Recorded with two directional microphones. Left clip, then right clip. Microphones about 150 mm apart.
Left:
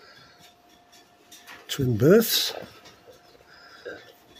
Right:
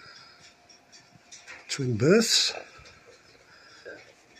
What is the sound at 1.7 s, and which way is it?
Speech, 25° left (ahead or behind).